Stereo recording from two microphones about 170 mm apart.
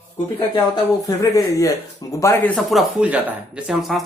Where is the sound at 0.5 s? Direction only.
20° left (ahead or behind).